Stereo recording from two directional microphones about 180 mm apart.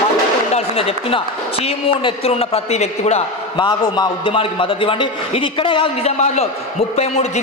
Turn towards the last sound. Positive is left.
turn(degrees=35)  # may be behind; listen again after turning